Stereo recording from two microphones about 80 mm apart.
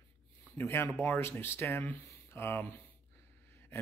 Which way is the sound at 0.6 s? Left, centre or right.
Left.